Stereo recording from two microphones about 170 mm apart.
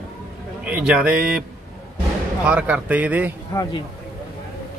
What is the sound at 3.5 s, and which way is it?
Speech, 20° left (ahead or behind).